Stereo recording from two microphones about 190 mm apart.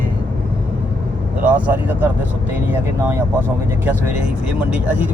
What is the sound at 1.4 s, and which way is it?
Speech, 10° right (ahead or behind).